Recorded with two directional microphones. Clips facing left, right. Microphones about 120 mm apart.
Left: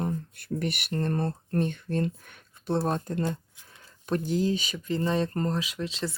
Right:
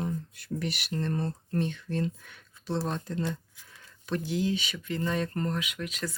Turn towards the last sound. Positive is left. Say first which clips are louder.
# left 3 dB
turn(degrees=25)  # may be behind; listen again after turning